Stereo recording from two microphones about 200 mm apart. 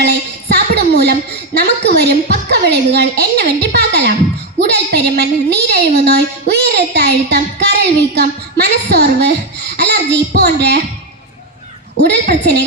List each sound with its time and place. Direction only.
0.0 s a woman's voice: 55° right (ahead or behind)
6.7 s a sound: 55° right (ahead or behind)
11.9 s a woman's voice: 55° right (ahead or behind)